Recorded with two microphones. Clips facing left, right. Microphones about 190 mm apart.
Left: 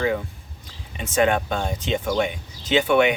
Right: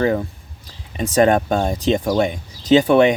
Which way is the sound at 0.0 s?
40° right (ahead or behind).